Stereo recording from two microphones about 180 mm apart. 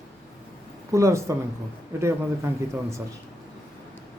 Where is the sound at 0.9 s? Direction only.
15° right (ahead or behind).